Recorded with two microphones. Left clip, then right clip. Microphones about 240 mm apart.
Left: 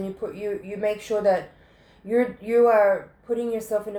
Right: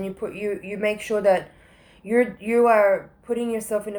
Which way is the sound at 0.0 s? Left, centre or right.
Right.